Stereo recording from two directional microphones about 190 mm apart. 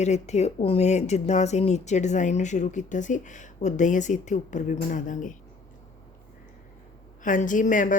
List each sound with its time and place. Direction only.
0.0 s speech: 35° left (ahead or behind)
7.2 s speech: 45° left (ahead or behind)